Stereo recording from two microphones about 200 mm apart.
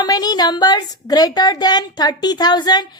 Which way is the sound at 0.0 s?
20° left (ahead or behind).